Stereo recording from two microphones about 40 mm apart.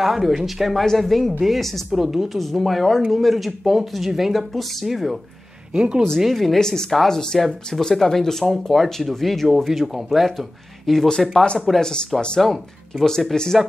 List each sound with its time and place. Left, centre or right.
0.0 s speech: centre
1.9 s speech: centre
5.7 s speech: right
6.1 s speech: centre
11.1 s speech: centre
12.4 s speech: centre